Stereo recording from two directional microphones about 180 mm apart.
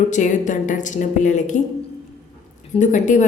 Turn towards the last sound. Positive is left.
turn(degrees=45)  # may be behind; listen again after turning